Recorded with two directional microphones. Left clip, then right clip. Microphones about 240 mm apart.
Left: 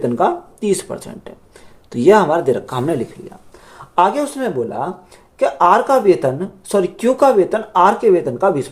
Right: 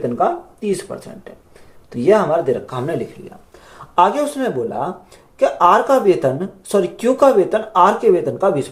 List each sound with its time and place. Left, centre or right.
0.0 s speech: left
3.9 s speech: centre